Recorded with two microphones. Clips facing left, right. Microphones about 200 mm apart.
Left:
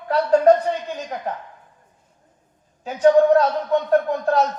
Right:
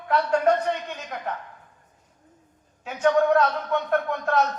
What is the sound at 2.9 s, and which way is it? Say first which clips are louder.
A man's voice: left 6 dB; 35° left (ahead or behind).